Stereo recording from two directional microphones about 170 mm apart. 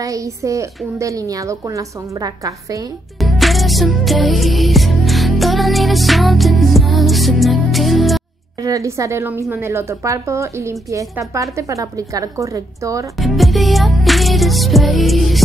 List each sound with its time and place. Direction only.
0.0 s a woman's voice: 20° right (ahead or behind)
3.2 s music: centre (ahead or behind)
8.5 s a woman's voice: 20° right (ahead or behind)
13.1 s music: centre (ahead or behind)